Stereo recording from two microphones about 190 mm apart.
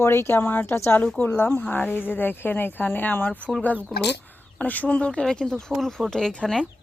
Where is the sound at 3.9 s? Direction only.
60° left (ahead or behind).